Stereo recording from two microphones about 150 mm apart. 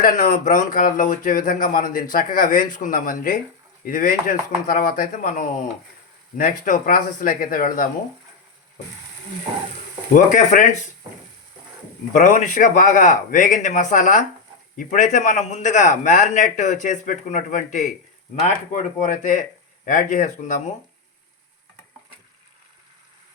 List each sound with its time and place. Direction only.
0.0 s speech: 60° left (ahead or behind)
10.2 s speech: 55° left (ahead or behind)
12.1 s speech: 55° left (ahead or behind)
19.1 s speech: 60° left (ahead or behind)